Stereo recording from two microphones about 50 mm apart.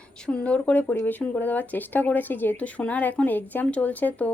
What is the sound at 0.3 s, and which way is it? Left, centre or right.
Speech, left.